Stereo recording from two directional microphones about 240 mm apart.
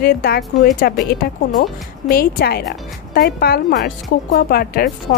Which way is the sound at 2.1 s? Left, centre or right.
Left.